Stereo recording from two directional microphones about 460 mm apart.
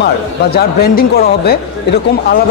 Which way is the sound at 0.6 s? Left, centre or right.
Centre.